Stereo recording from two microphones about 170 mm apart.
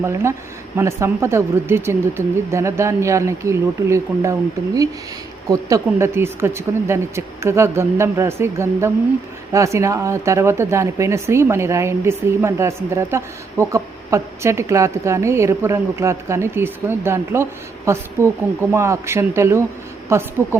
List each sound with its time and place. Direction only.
0.0 s speech: 15° right (ahead or behind)